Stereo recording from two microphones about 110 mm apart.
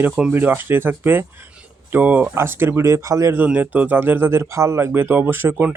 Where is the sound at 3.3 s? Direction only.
15° right (ahead or behind).